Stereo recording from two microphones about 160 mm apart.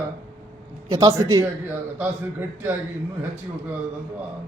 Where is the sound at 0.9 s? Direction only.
20° right (ahead or behind).